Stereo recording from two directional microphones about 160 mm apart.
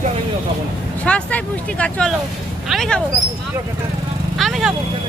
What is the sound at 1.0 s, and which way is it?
Speech, 5° left (ahead or behind).